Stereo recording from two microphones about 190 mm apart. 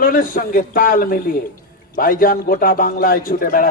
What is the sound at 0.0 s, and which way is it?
A man's voice, 50° left (ahead or behind).